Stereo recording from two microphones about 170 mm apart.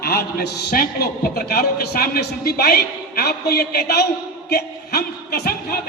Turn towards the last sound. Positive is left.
turn(degrees=65)  # may be behind; listen again after turning